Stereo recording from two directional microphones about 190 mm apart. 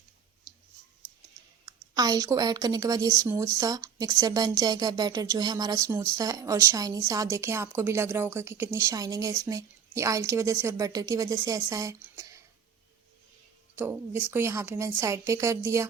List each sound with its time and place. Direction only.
1.6 s a woman's voice: 20° right (ahead or behind)
13.7 s a woman's voice: 10° right (ahead or behind)